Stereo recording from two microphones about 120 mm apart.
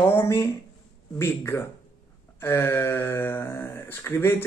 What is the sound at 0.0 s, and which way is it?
Speech, 20° left (ahead or behind).